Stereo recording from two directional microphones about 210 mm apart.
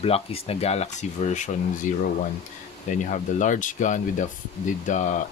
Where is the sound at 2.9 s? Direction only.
35° left (ahead or behind).